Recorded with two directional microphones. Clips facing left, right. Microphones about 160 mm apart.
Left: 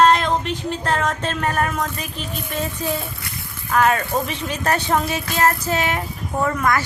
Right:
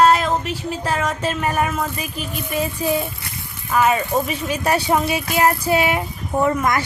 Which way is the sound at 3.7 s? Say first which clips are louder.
Right 1 dB; 5° right (ahead or behind).